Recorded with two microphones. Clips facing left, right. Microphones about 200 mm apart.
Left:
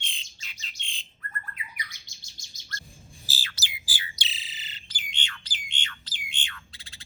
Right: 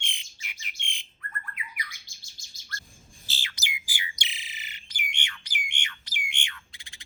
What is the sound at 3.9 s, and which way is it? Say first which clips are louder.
Bird: even; 15° right (ahead or behind).